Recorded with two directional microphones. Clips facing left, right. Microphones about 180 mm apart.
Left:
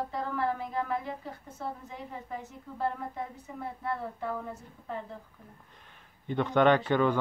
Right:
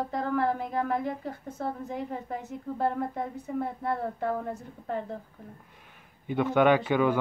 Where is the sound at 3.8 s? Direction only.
50° right (ahead or behind).